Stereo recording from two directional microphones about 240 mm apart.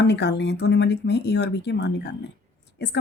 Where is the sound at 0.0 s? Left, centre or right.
Left.